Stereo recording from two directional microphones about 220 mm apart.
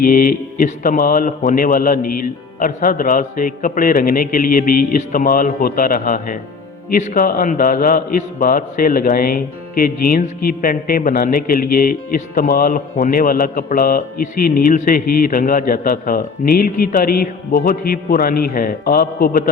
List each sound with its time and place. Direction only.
0.0 s a man's voice: 40° left (ahead or behind)